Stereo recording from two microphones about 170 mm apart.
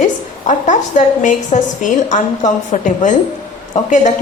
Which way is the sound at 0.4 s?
45° left (ahead or behind).